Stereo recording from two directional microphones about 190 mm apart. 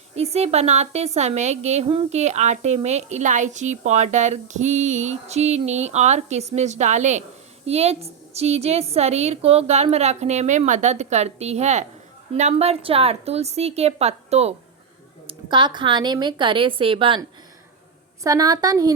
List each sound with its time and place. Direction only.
0.2 s a woman's voice: 35° right (ahead or behind)